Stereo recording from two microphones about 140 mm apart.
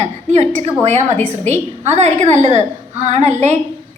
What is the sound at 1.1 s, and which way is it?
Speech, 10° left (ahead or behind).